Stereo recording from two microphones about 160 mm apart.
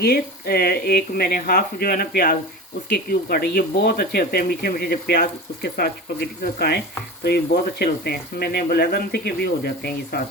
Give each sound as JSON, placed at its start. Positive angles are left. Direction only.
{"t": 0.0, "sound": "speech", "side_deg": 75}